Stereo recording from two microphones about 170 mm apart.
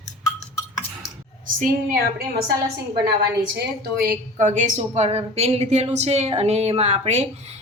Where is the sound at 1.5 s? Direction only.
55° right (ahead or behind).